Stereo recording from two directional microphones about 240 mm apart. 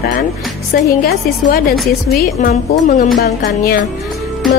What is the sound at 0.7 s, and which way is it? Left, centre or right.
Speech, left.